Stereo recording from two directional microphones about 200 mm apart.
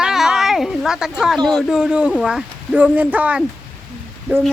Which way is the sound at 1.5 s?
Centre (ahead or behind).